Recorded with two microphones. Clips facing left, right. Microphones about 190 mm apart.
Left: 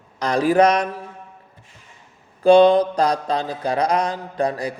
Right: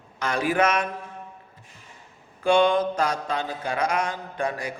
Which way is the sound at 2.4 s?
35° left (ahead or behind).